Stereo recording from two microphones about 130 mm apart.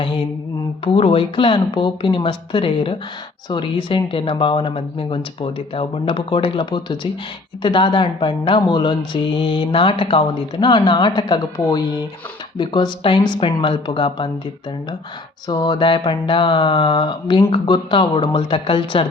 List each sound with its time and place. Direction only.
0.9 s speech: 45° left (ahead or behind)
15.4 s speech: 30° left (ahead or behind)